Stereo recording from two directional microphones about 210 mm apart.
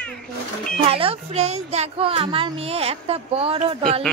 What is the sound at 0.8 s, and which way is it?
Speech, 25° right (ahead or behind).